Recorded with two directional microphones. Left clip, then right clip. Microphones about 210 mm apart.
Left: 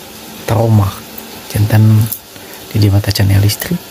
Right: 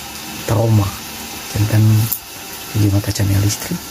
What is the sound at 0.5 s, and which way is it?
Speech, 25° left (ahead or behind).